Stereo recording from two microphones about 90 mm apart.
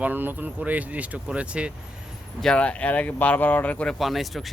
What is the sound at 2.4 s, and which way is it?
Speech, 10° left (ahead or behind).